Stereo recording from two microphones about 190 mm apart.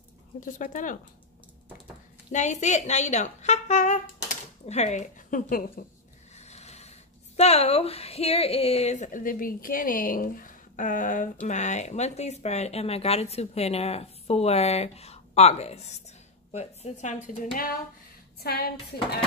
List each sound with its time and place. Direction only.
0.5 s speech: 40° left (ahead or behind)
2.3 s speech: 40° left (ahead or behind)
6.3 s speech: 35° left (ahead or behind)
18.4 s speech: 55° left (ahead or behind)